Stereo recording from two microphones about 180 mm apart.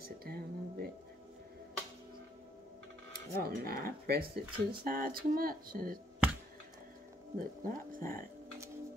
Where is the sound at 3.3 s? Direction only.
55° right (ahead or behind).